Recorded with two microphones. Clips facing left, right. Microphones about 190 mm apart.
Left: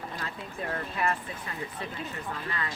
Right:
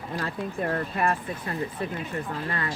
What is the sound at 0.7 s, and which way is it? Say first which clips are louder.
Speech: right 3 dB; 50° right (ahead or behind).